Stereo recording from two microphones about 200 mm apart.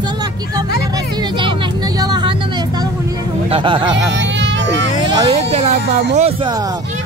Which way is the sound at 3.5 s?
25° right (ahead or behind).